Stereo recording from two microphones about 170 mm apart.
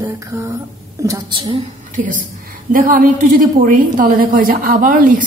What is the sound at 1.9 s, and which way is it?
A woman's voice, 50° right (ahead or behind).